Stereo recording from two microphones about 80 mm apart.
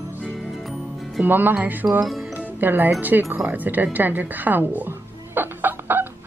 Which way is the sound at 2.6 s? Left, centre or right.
Right.